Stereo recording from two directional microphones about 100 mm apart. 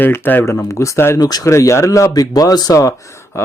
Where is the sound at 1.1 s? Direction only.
40° left (ahead or behind).